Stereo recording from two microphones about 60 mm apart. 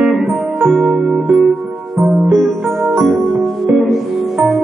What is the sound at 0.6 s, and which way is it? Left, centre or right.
Music, centre.